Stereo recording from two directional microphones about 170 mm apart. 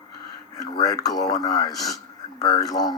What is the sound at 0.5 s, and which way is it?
Speech, 20° left (ahead or behind).